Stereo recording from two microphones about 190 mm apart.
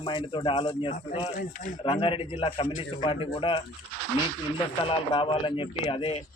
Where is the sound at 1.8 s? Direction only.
30° left (ahead or behind).